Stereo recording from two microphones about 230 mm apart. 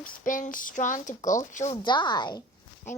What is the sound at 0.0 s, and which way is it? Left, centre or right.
Speech, left.